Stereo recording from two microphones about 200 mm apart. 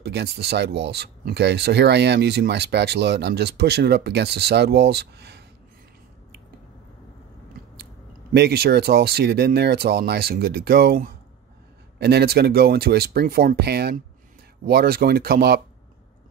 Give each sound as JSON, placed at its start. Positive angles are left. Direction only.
{"t": 0.0, "sound": "speech", "side_deg": -55}
{"t": 7.7, "sound": "speech", "side_deg": -55}